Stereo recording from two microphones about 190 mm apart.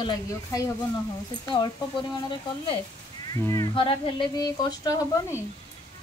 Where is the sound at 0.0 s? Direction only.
20° left (ahead or behind).